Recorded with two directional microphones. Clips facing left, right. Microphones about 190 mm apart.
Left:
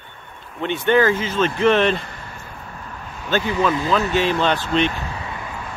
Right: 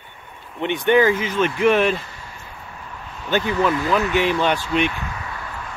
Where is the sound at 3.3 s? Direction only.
15° right (ahead or behind).